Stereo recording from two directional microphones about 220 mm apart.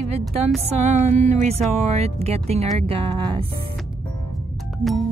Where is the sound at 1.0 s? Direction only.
30° right (ahead or behind).